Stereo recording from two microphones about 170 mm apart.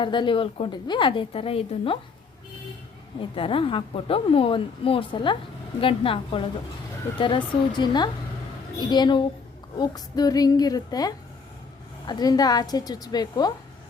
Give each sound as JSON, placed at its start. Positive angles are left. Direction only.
{"t": 0.0, "sound": "a woman's voice", "side_deg": 30}
{"t": 3.2, "sound": "a woman's voice", "side_deg": 30}